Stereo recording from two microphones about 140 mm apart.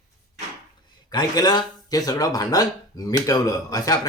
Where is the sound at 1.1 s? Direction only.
30° left (ahead or behind).